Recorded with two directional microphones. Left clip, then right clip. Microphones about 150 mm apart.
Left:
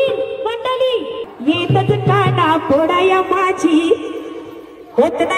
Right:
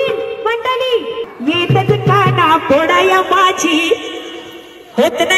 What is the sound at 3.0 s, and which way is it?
Speech, 15° right (ahead or behind).